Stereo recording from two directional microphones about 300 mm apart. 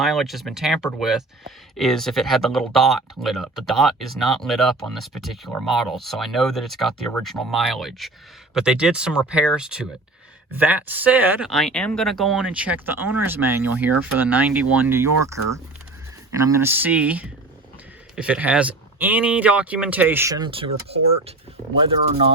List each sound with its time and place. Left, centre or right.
0.0 s speech: centre
16.6 s speech: centre